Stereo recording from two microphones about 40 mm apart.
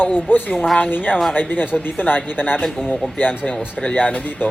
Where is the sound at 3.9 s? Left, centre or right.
Left.